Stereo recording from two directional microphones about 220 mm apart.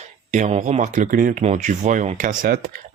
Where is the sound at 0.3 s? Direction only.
35° right (ahead or behind).